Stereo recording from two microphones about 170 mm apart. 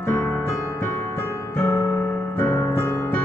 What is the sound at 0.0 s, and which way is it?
Music, 10° left (ahead or behind).